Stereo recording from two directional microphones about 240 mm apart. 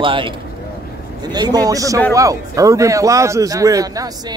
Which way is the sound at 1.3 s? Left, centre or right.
Centre.